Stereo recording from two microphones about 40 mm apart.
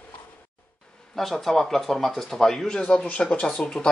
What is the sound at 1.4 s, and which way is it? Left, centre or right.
Speech, centre.